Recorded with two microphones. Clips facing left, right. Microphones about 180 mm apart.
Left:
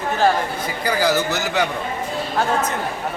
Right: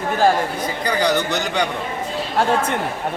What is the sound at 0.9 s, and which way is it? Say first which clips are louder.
Speech: even; 5° left (ahead or behind).